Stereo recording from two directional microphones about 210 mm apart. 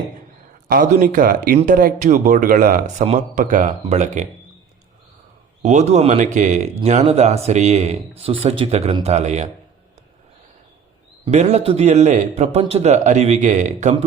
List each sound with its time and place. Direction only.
0.7 s speech: 40° right (ahead or behind)
5.6 s speech: 35° right (ahead or behind)
11.3 s speech: 35° right (ahead or behind)